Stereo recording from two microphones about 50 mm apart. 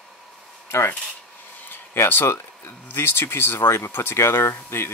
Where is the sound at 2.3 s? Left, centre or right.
Left.